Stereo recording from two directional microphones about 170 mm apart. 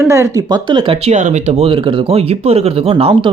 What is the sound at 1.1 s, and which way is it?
Speech, 40° right (ahead or behind).